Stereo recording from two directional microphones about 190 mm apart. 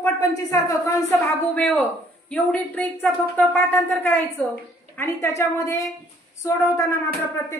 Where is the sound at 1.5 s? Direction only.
10° left (ahead or behind).